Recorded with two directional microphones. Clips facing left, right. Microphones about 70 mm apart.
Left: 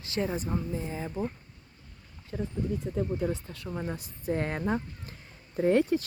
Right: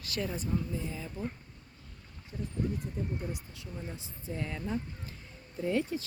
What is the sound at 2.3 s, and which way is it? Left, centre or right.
Speech, left.